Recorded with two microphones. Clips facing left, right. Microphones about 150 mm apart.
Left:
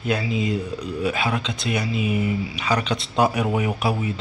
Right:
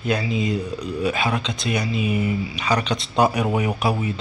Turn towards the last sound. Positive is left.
turn(degrees=5)  # may be behind; listen again after turning